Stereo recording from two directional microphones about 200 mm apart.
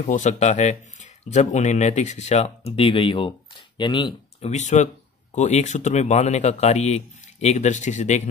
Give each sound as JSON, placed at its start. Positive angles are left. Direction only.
{"t": 0.0, "sound": "speech", "side_deg": 35}
{"t": 4.5, "sound": "speech", "side_deg": 35}